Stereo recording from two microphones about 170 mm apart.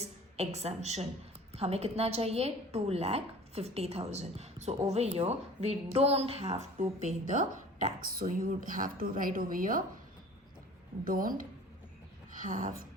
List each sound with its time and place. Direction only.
0.0 s a woman's voice: 40° right (ahead or behind)
8.0 s speech: 55° right (ahead or behind)
11.0 s a woman's voice: 55° right (ahead or behind)